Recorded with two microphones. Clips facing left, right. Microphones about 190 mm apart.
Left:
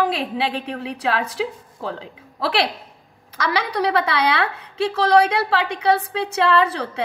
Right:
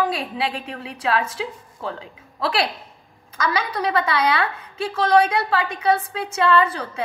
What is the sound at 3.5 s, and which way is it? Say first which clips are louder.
A woman's voice: left 2 dB; 70° left (ahead or behind).